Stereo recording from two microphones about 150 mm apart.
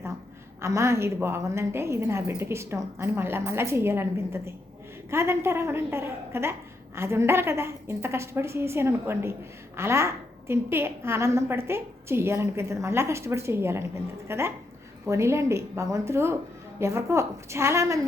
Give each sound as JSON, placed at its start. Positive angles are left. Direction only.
{"t": 0.6, "sound": "a woman's voice", "side_deg": -20}